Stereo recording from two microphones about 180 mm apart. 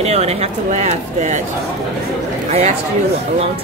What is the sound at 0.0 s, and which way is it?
Speech, 35° right (ahead or behind).